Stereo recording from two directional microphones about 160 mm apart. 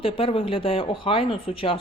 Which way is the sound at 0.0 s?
35° left (ahead or behind).